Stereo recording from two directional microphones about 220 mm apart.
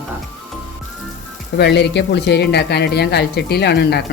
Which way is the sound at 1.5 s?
50° left (ahead or behind).